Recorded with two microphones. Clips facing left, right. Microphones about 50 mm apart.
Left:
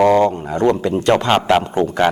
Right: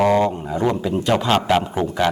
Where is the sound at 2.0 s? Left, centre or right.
Left.